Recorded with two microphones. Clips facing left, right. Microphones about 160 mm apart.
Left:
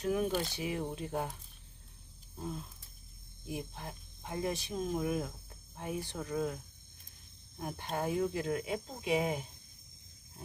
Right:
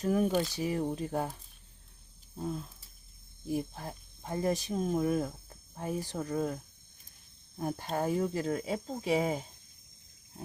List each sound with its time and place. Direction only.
0.0 s speech: 40° right (ahead or behind)
3.5 s speech: 35° right (ahead or behind)
7.6 s speech: 35° right (ahead or behind)